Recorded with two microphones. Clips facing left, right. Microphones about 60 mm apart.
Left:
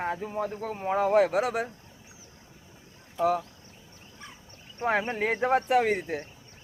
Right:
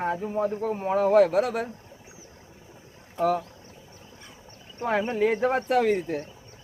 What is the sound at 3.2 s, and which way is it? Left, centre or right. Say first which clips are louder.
Speech: right 1 dB; right.